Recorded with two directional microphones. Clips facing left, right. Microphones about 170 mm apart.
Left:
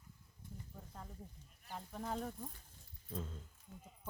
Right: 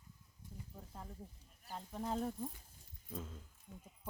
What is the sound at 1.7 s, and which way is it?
Speech, 5° right (ahead or behind).